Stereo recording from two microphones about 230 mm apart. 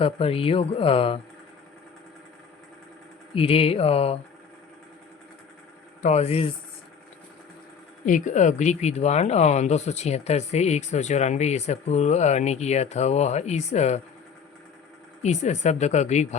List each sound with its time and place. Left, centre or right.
0.0 s speech: left
3.3 s speech: left
6.0 s speech: left
8.0 s speech: left
15.2 s speech: left